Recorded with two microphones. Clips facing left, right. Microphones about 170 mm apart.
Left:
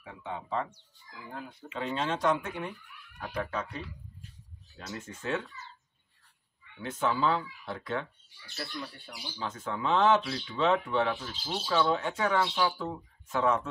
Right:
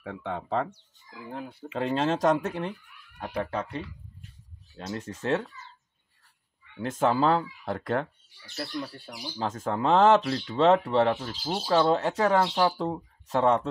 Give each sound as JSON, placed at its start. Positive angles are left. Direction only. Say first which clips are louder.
{"t": 0.0, "sound": "speech", "louder": "right 6 dB", "side_deg": -60}
{"t": 1.7, "sound": "speech", "louder": "right 6 dB", "side_deg": -50}
{"t": 6.9, "sound": "speech", "louder": "right 5 dB", "side_deg": -45}